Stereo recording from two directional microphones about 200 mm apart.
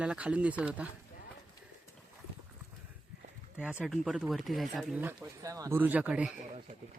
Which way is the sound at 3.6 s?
5° right (ahead or behind).